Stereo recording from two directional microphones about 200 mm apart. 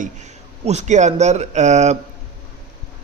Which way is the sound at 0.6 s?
35° right (ahead or behind).